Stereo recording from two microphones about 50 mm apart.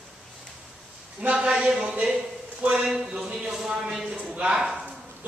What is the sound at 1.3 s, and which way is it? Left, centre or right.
A man's voice, centre.